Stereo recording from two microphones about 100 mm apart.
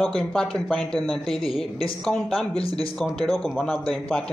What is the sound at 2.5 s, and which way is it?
Speech, 75° left (ahead or behind).